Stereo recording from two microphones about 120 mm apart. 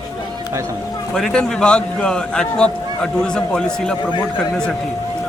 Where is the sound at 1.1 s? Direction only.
5° left (ahead or behind).